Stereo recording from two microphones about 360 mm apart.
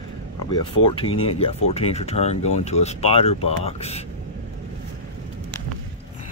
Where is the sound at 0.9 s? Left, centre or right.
Centre.